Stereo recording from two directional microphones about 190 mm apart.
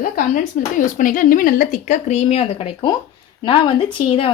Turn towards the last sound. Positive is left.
turn(degrees=30)  # may be behind; listen again after turning